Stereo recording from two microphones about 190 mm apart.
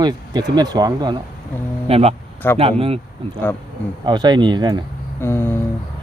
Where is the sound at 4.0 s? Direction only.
20° right (ahead or behind).